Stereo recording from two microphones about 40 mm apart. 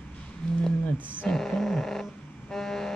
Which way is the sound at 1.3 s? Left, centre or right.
Centre.